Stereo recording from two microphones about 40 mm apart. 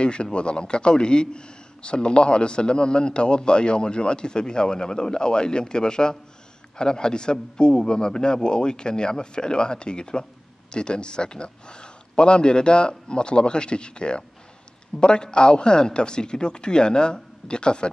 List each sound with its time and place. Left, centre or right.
0.0 s a man's voice: left